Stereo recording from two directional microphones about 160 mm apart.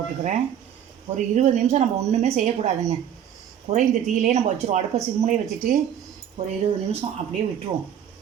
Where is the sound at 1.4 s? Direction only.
45° right (ahead or behind).